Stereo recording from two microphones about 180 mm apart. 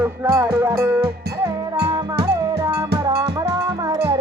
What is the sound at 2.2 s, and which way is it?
Music, 15° right (ahead or behind).